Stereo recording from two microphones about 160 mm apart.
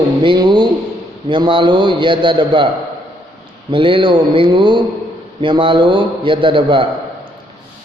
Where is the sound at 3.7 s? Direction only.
30° right (ahead or behind).